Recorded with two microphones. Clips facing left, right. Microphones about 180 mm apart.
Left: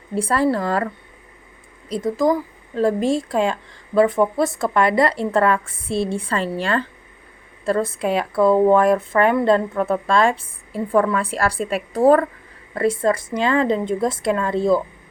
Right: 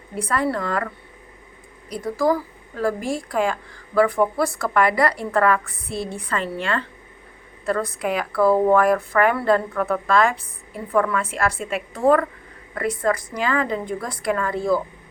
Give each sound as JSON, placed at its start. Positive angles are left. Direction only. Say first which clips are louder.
{"t": 0.1, "sound": "speech", "louder": "left 4 dB", "side_deg": 30}
{"t": 1.9, "sound": "speech", "louder": "left 2 dB", "side_deg": 20}